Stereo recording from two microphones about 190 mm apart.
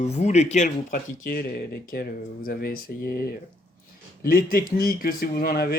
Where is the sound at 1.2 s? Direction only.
55° left (ahead or behind).